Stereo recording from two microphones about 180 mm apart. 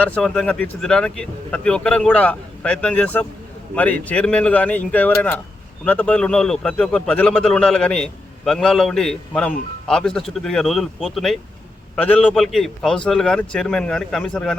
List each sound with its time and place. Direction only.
0.0 s a man's voice: 5° left (ahead or behind)